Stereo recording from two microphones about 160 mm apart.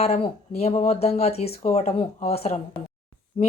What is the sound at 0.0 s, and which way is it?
Speech, 40° left (ahead or behind).